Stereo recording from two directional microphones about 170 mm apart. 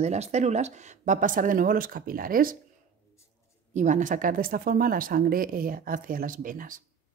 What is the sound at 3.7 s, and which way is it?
Speech, 45° right (ahead or behind).